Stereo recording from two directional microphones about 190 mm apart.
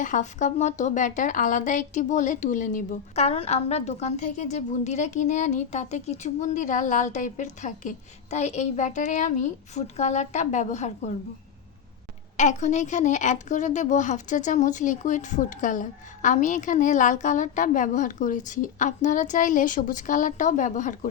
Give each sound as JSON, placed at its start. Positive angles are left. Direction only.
{"t": 0.0, "sound": "a woman's voice", "side_deg": 40}
{"t": 12.4, "sound": "a woman's voice", "side_deg": 40}